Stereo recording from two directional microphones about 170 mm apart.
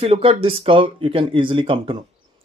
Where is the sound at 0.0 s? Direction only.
35° right (ahead or behind).